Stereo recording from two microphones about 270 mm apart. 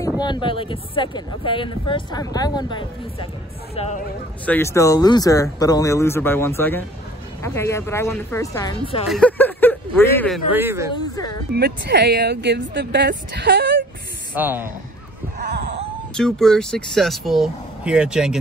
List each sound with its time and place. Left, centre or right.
0.2 s speech: centre
4.5 s speech: centre
10.5 s speech: centre
11.5 s speech: right
14.3 s speech: centre
15.3 s a sound: right
16.2 s speech: centre